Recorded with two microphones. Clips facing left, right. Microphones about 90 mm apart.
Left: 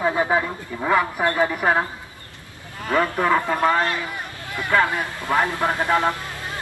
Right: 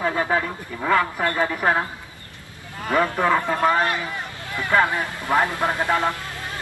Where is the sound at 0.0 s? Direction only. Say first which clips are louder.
Left 2 dB; 15° left (ahead or behind).